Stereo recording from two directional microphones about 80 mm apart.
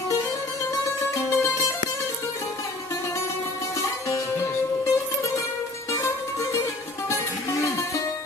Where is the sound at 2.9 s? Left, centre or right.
Left.